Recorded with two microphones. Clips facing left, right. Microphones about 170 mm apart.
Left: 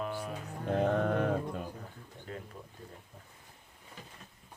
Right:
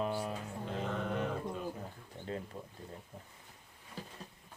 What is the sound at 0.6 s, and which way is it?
Music, 55° left (ahead or behind).